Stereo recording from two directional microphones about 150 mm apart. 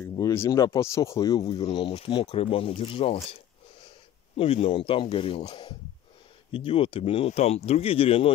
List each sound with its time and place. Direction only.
0.1 s speech: 20° left (ahead or behind)
1.4 s speech: 40° left (ahead or behind)
4.4 s speech: 40° left (ahead or behind)